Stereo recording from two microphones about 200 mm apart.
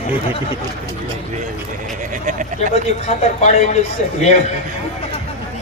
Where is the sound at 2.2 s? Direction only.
40° right (ahead or behind).